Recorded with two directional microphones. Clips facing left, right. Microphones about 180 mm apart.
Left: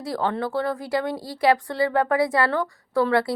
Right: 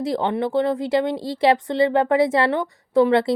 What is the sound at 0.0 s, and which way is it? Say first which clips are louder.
A woman's voice: right 4 dB; 20° right (ahead or behind).